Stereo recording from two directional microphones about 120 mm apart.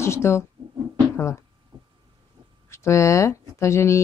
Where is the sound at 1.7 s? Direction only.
35° right (ahead or behind).